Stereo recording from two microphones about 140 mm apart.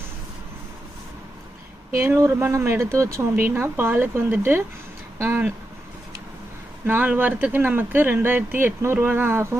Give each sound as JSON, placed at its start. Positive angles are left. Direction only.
{"t": 2.0, "sound": "speech", "side_deg": -15}
{"t": 6.8, "sound": "speech", "side_deg": -10}